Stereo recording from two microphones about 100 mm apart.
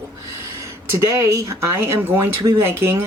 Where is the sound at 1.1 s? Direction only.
35° right (ahead or behind).